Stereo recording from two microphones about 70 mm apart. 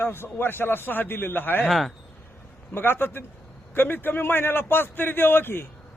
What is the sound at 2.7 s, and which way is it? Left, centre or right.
A man's voice, left.